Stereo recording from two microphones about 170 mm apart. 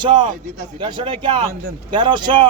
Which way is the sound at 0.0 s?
25° right (ahead or behind).